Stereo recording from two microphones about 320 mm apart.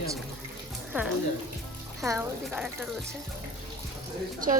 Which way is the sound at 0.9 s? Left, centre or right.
Centre.